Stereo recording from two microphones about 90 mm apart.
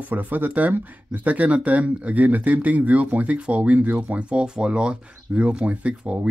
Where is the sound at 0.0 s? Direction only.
20° right (ahead or behind).